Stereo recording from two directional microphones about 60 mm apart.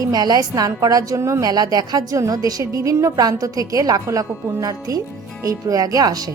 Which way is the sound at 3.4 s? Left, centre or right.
Right.